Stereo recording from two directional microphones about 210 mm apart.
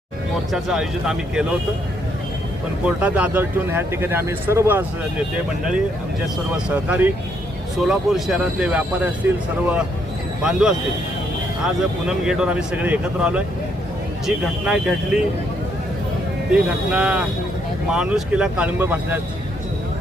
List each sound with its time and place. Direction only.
0.5 s speech: 5° right (ahead or behind)
2.8 s speech: 5° right (ahead or behind)
6.7 s speech: 5° right (ahead or behind)
10.4 s speech: 5° right (ahead or behind)
16.5 s speech: 5° right (ahead or behind)